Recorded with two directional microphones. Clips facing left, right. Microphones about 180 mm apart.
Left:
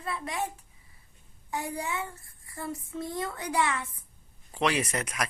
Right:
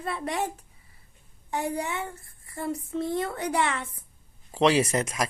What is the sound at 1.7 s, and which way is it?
Speech, 20° right (ahead or behind).